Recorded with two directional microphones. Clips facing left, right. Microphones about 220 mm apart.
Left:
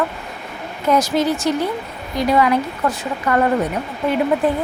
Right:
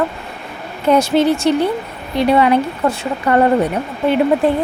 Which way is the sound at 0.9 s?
30° right (ahead or behind).